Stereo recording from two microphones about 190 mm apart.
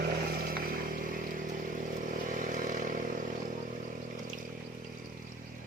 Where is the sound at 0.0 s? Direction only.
50° right (ahead or behind).